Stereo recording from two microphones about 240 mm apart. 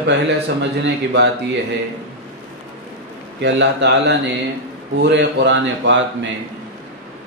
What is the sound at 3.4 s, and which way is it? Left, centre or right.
A man's voice, right.